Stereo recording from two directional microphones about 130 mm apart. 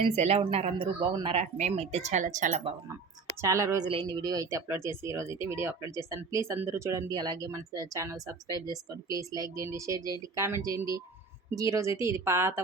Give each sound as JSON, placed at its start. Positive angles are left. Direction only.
{"t": 0.2, "sound": "speech", "side_deg": -55}
{"t": 0.9, "sound": "speech", "side_deg": -35}
{"t": 1.4, "sound": "speech", "side_deg": -60}
{"t": 3.4, "sound": "speech", "side_deg": -25}
{"t": 3.8, "sound": "speech", "side_deg": -40}